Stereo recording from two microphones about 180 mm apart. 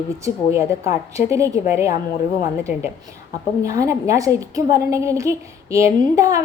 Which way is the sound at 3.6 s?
15° right (ahead or behind).